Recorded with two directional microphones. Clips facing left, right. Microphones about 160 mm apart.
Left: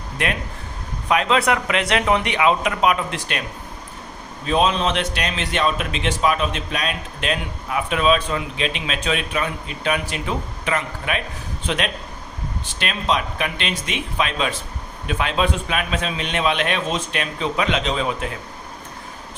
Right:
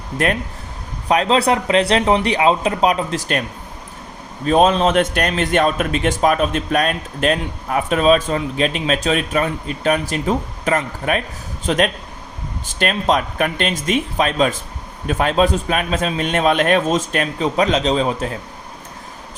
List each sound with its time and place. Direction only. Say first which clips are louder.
1.0 s speech: right 3 dB; 35° right (ahead or behind)
4.4 s a man's voice: right 5 dB; 45° right (ahead or behind)